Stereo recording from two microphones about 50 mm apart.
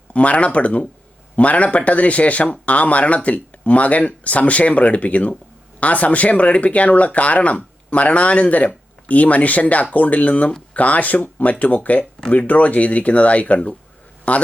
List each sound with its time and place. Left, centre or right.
0.1 s speech: left